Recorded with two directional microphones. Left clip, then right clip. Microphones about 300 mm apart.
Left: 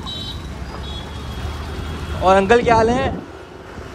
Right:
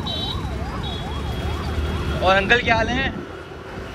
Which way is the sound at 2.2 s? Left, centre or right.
Left.